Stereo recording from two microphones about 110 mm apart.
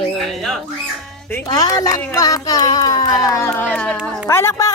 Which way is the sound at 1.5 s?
30° left (ahead or behind).